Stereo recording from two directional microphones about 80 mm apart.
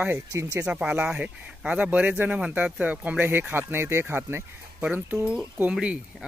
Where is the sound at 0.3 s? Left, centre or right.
Right.